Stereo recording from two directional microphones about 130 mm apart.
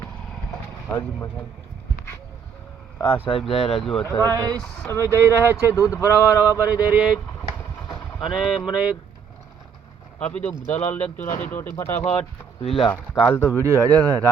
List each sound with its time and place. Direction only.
0.9 s speech: 15° left (ahead or behind)
3.2 s speech: 45° left (ahead or behind)
4.0 s speech: 20° left (ahead or behind)
4.4 s speech: 30° right (ahead or behind)
4.8 s speech: 20° left (ahead or behind)
6.1 s a sound: 20° right (ahead or behind)
7.9 s vehicle: 5° right (ahead or behind)
10.2 s speech: 10° left (ahead or behind)
12.6 s speech: 45° left (ahead or behind)
13.2 s speech: 20° left (ahead or behind)
13.6 s speech: 25° right (ahead or behind)